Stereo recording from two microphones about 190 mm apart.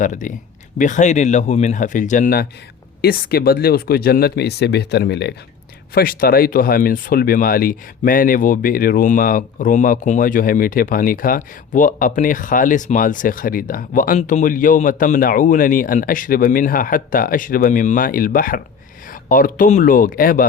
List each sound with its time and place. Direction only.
0.0 s speech: 40° left (ahead or behind); by 5.3 s 60° left (ahead or behind)
5.9 s speech: 50° left (ahead or behind)